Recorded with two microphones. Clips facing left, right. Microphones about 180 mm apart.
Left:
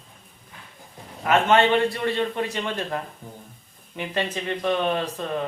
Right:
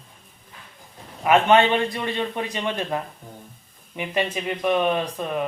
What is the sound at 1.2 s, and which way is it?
A man's voice, 15° right (ahead or behind).